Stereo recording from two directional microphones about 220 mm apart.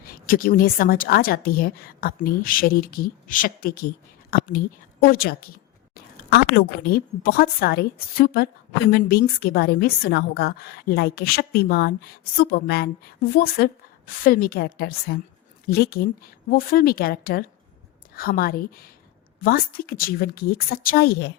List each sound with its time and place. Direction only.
0.0 s a woman's voice: 40° left (ahead or behind)